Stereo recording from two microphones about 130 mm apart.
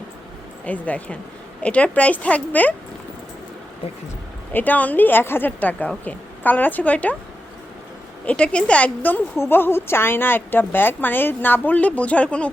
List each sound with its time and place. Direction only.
0.6 s a woman's voice: 10° left (ahead or behind)
4.5 s a woman's voice: 15° left (ahead or behind)
8.3 s a woman's voice: 10° left (ahead or behind)